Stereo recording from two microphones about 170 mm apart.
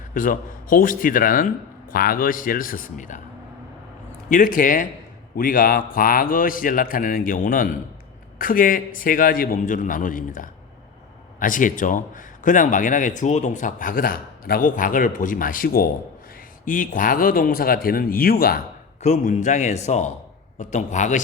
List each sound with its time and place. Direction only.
0.1 s a man's voice: 55° left (ahead or behind)
4.3 s a man's voice: 55° left (ahead or behind)
19.0 s a man's voice: 50° left (ahead or behind)